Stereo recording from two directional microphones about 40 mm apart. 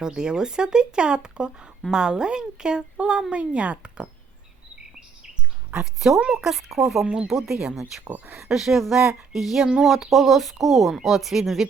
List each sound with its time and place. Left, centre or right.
0.0 s speech: centre
5.8 s speech: centre
6.5 s speech: centre
8.0 s speech: right
8.4 s speech: centre